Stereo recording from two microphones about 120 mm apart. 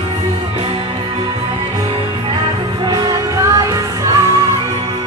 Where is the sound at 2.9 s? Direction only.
30° right (ahead or behind).